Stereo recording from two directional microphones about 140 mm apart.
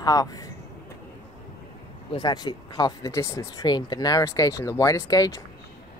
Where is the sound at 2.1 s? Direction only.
30° left (ahead or behind).